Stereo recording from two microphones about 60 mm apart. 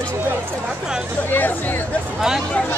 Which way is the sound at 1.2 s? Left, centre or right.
Left.